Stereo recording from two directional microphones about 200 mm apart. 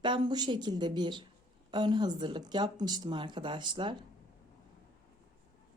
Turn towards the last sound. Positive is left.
turn(degrees=-25)  # may be behind; listen again after turning